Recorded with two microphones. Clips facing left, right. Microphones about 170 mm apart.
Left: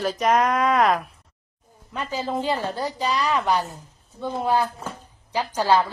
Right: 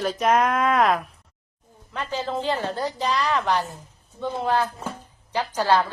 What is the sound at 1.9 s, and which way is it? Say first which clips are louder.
A woman's voice: left 1 dB; 10° left (ahead or behind).